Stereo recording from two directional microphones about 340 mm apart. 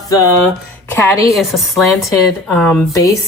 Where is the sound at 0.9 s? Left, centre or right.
Centre.